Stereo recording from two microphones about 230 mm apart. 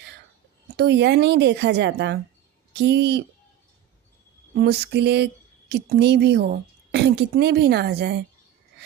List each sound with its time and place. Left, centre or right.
0.8 s speech: right
4.5 s speech: right